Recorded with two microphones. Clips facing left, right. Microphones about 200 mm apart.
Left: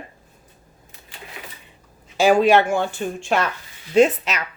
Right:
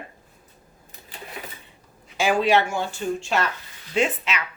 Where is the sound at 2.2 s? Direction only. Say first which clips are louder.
Left 5 dB; 40° left (ahead or behind).